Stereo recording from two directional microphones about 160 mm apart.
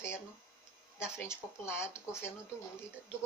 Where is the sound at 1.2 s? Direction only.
15° left (ahead or behind).